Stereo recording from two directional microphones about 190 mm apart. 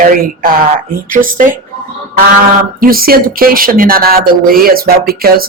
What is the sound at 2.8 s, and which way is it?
Speech, 50° right (ahead or behind).